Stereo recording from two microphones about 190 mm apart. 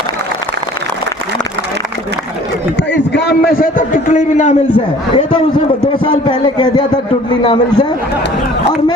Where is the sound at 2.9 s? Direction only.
65° left (ahead or behind); by 4.5 s 40° left (ahead or behind).